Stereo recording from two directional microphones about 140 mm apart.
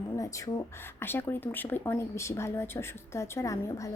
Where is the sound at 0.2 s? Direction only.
25° left (ahead or behind).